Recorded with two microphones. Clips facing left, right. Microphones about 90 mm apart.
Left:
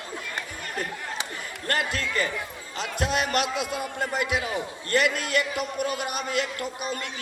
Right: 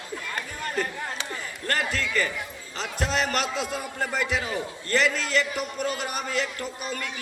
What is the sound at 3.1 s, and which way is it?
A man's voice, 20° left (ahead or behind).